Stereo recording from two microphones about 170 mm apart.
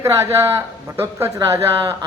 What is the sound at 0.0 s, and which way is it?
A man's voice, 15° right (ahead or behind).